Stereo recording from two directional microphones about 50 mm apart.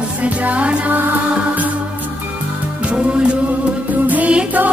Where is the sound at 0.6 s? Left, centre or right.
Right.